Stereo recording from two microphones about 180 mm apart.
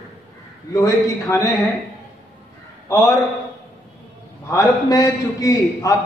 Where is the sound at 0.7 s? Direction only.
20° left (ahead or behind).